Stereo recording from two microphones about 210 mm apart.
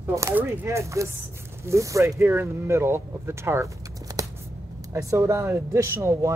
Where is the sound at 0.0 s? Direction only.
15° right (ahead or behind).